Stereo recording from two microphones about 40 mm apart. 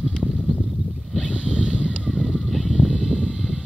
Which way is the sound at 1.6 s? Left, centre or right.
Right.